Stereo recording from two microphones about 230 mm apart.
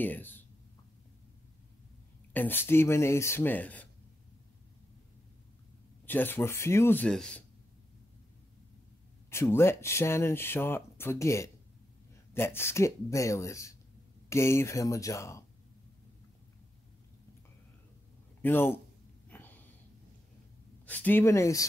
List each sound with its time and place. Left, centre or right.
0.0 s speech: centre
2.3 s speech: centre
6.0 s speech: centre
9.3 s speech: centre
18.4 s speech: centre
19.2 s a sound: centre
20.8 s speech: centre